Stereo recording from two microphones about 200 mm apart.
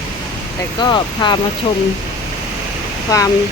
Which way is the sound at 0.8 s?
20° left (ahead or behind).